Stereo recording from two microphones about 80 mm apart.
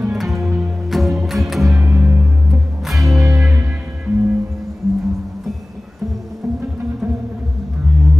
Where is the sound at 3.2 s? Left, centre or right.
Right.